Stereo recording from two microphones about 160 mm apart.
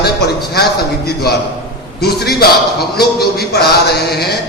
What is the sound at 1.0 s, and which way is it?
A man's voice, 85° left.